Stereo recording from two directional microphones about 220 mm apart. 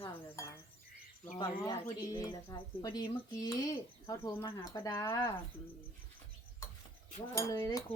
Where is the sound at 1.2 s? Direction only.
15° left (ahead or behind).